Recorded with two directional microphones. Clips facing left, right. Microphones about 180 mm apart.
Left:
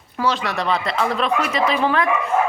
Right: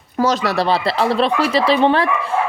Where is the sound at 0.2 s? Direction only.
40° right (ahead or behind).